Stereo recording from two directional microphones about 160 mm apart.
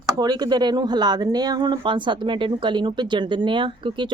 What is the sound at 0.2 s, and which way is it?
Speech, 25° right (ahead or behind).